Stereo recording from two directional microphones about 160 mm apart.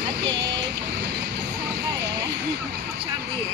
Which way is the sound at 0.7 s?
90° right.